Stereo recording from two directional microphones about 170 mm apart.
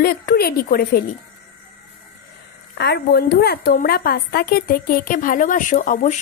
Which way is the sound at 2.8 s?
70° left (ahead or behind).